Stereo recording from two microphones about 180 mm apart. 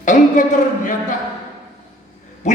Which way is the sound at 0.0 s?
45° left (ahead or behind).